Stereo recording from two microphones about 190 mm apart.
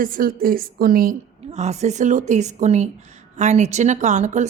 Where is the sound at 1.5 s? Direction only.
35° right (ahead or behind).